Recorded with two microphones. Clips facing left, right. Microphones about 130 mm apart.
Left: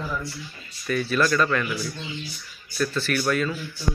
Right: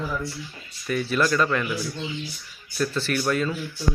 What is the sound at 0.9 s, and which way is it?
Speech, 15° right (ahead or behind).